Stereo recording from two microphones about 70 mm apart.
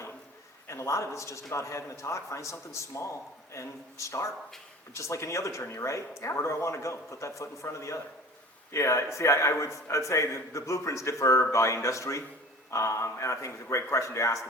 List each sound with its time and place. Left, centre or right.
0.7 s a man's voice: left